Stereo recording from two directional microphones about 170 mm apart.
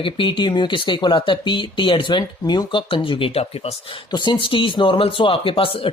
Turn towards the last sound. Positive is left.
turn(degrees=30)  # may be behind; listen again after turning